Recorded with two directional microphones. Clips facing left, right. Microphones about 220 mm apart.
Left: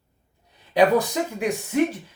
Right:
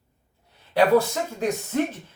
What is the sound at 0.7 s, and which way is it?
Speech, 15° left (ahead or behind).